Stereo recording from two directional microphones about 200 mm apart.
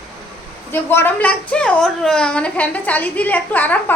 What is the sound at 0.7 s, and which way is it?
A woman's voice, 10° left (ahead or behind).